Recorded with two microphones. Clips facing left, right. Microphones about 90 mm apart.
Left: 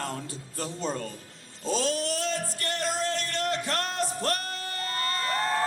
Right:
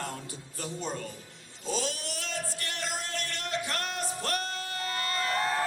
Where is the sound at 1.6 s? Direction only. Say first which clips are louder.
Left 6 dB; 35° left (ahead or behind).